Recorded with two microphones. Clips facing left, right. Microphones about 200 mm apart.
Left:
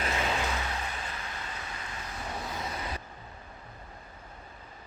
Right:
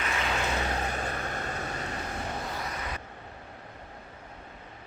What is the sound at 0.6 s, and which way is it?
Vehicle, 45° right (ahead or behind).